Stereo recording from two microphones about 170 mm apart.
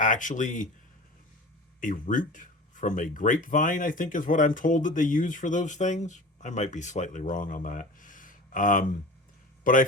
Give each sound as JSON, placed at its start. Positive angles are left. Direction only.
{"t": 0.0, "sound": "speech", "side_deg": 50}
{"t": 1.8, "sound": "speech", "side_deg": 50}